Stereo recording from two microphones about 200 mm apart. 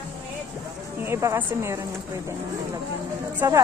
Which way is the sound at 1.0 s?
15° right (ahead or behind).